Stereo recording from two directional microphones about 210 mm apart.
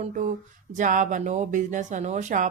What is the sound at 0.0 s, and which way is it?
A woman's voice, 35° right (ahead or behind).